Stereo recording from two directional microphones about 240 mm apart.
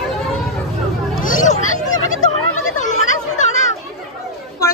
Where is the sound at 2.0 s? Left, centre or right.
Left.